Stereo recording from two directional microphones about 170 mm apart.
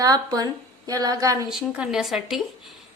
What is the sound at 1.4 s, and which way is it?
Speech, 5° right (ahead or behind).